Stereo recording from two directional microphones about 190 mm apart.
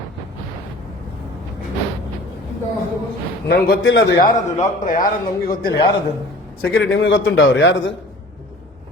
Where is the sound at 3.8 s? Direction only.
90° left.